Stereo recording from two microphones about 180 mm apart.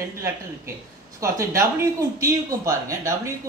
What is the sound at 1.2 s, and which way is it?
Speech, 15° right (ahead or behind).